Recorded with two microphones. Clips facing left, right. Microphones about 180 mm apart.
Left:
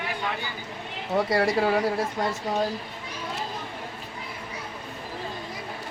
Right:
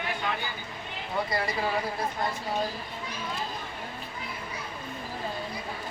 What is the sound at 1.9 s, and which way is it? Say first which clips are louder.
Speech: left 5 dB; 90° left.